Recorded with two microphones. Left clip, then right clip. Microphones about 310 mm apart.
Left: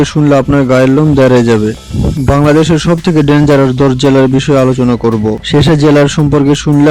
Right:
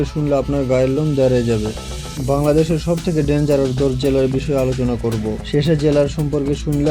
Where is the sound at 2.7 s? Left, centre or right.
Left.